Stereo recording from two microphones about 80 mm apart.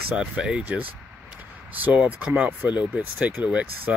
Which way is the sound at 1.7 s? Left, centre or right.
Centre.